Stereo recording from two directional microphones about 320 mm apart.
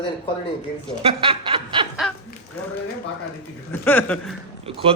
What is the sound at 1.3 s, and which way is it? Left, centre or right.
Speech, centre.